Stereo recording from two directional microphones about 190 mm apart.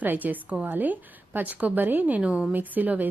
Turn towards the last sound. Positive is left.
turn(degrees=-10)  # may be behind; listen again after turning